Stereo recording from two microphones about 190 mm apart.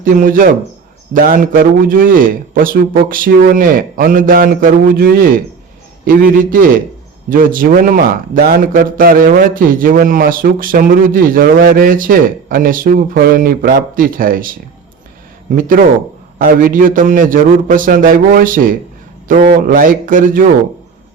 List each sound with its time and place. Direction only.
0.0 s a man's voice: 45° right (ahead or behind)
15.5 s a man's voice: 45° right (ahead or behind)